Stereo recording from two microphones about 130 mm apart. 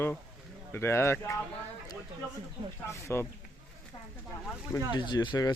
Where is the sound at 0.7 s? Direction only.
20° left (ahead or behind).